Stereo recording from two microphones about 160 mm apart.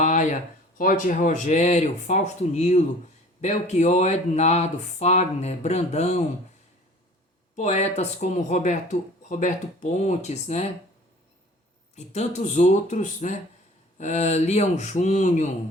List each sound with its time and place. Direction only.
0.0 s a sound: 50° left (ahead or behind)
0.8 s speech: 55° left (ahead or behind)
7.5 s speech: 45° left (ahead or behind)
11.9 s speech: 45° left (ahead or behind)